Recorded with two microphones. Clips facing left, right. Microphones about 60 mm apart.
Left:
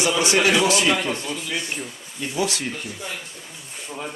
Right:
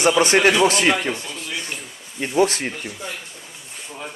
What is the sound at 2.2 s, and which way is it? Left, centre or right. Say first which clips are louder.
Speech: right 6 dB; right.